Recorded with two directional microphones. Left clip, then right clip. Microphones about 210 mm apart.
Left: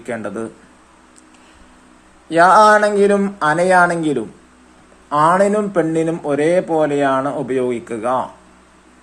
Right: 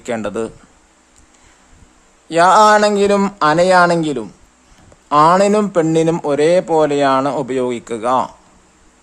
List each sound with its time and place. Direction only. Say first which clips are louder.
0.0 s speech: right 4 dB; 35° right (ahead or behind)
2.3 s speech: even; 25° right (ahead or behind)
5.5 s speech: right 3 dB; 35° right (ahead or behind)